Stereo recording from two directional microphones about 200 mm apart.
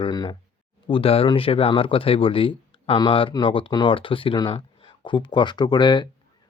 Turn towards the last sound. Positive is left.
turn(degrees=20)  # may be behind; listen again after turning